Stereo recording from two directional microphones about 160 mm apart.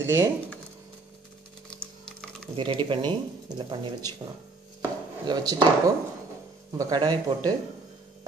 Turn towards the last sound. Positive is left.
turn(degrees=-25)  # may be behind; listen again after turning